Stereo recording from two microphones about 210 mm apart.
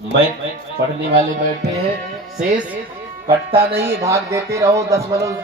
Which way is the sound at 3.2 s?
10° right (ahead or behind).